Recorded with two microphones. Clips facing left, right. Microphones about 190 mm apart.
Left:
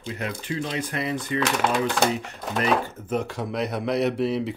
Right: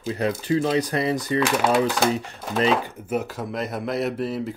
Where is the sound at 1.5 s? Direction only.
5° right (ahead or behind).